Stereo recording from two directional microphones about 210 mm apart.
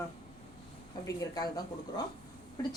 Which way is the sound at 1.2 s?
20° left (ahead or behind).